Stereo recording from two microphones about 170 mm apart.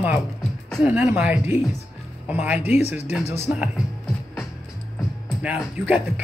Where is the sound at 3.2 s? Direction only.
40° left (ahead or behind).